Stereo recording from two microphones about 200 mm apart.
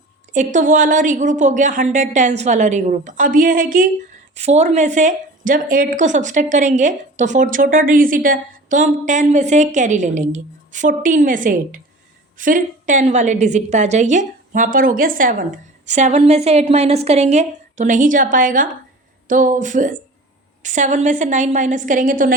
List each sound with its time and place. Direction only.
0.3 s speech: 40° right (ahead or behind)